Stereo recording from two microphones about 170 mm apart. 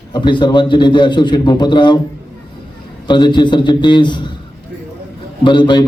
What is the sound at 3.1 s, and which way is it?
A man's voice, 25° left (ahead or behind).